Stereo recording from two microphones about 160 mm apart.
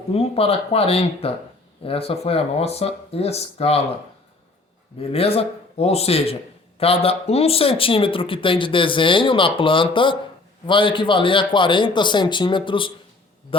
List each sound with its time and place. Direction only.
0.1 s speech: 35° left (ahead or behind)
4.9 s speech: 35° left (ahead or behind)